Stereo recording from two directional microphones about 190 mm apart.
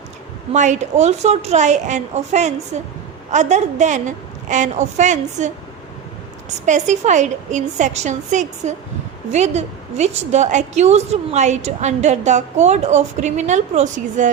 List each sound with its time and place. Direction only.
0.5 s a woman's voice: 40° right (ahead or behind)
6.7 s a woman's voice: 40° right (ahead or behind)